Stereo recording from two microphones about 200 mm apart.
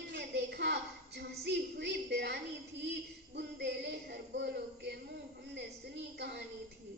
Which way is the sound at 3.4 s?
55° right (ahead or behind).